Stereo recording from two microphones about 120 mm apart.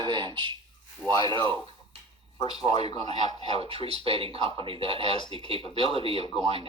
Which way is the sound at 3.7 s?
55° right (ahead or behind).